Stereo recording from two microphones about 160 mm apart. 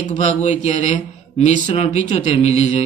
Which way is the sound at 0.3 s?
45° left (ahead or behind).